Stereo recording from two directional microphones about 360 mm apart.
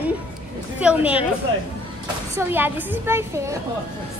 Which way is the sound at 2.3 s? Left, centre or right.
Centre.